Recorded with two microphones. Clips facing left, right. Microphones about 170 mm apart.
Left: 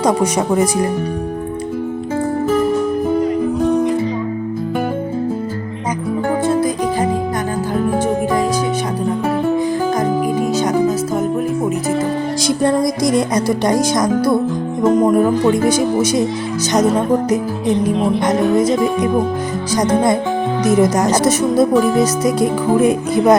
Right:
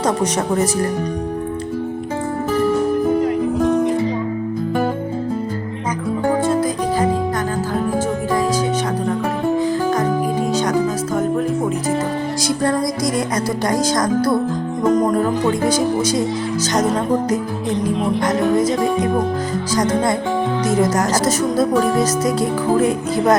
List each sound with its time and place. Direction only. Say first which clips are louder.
0.0 s music: left 3 dB; 10° left (ahead or behind)
10.5 s music: left 3 dB; 10° left (ahead or behind)
12.5 s music: left 4 dB; 20° left (ahead or behind)
16.7 s music: left 4 dB; 10° left (ahead or behind)
18.2 s speech: even; 25° left (ahead or behind)
19.9 s speech: left 3 dB; 20° left (ahead or behind)
21.8 s music: left 3 dB; 15° left (ahead or behind)